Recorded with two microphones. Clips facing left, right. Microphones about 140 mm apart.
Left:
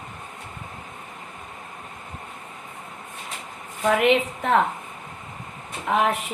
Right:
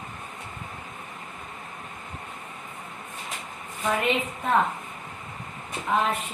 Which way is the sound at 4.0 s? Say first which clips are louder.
Left 6 dB; 90° left.